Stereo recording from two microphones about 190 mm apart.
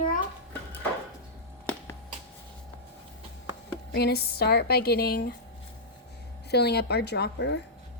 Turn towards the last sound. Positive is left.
turn(degrees=60)  # may be behind; listen again after turning